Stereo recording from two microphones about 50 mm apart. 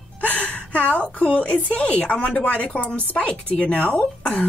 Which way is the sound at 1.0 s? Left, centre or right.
Left.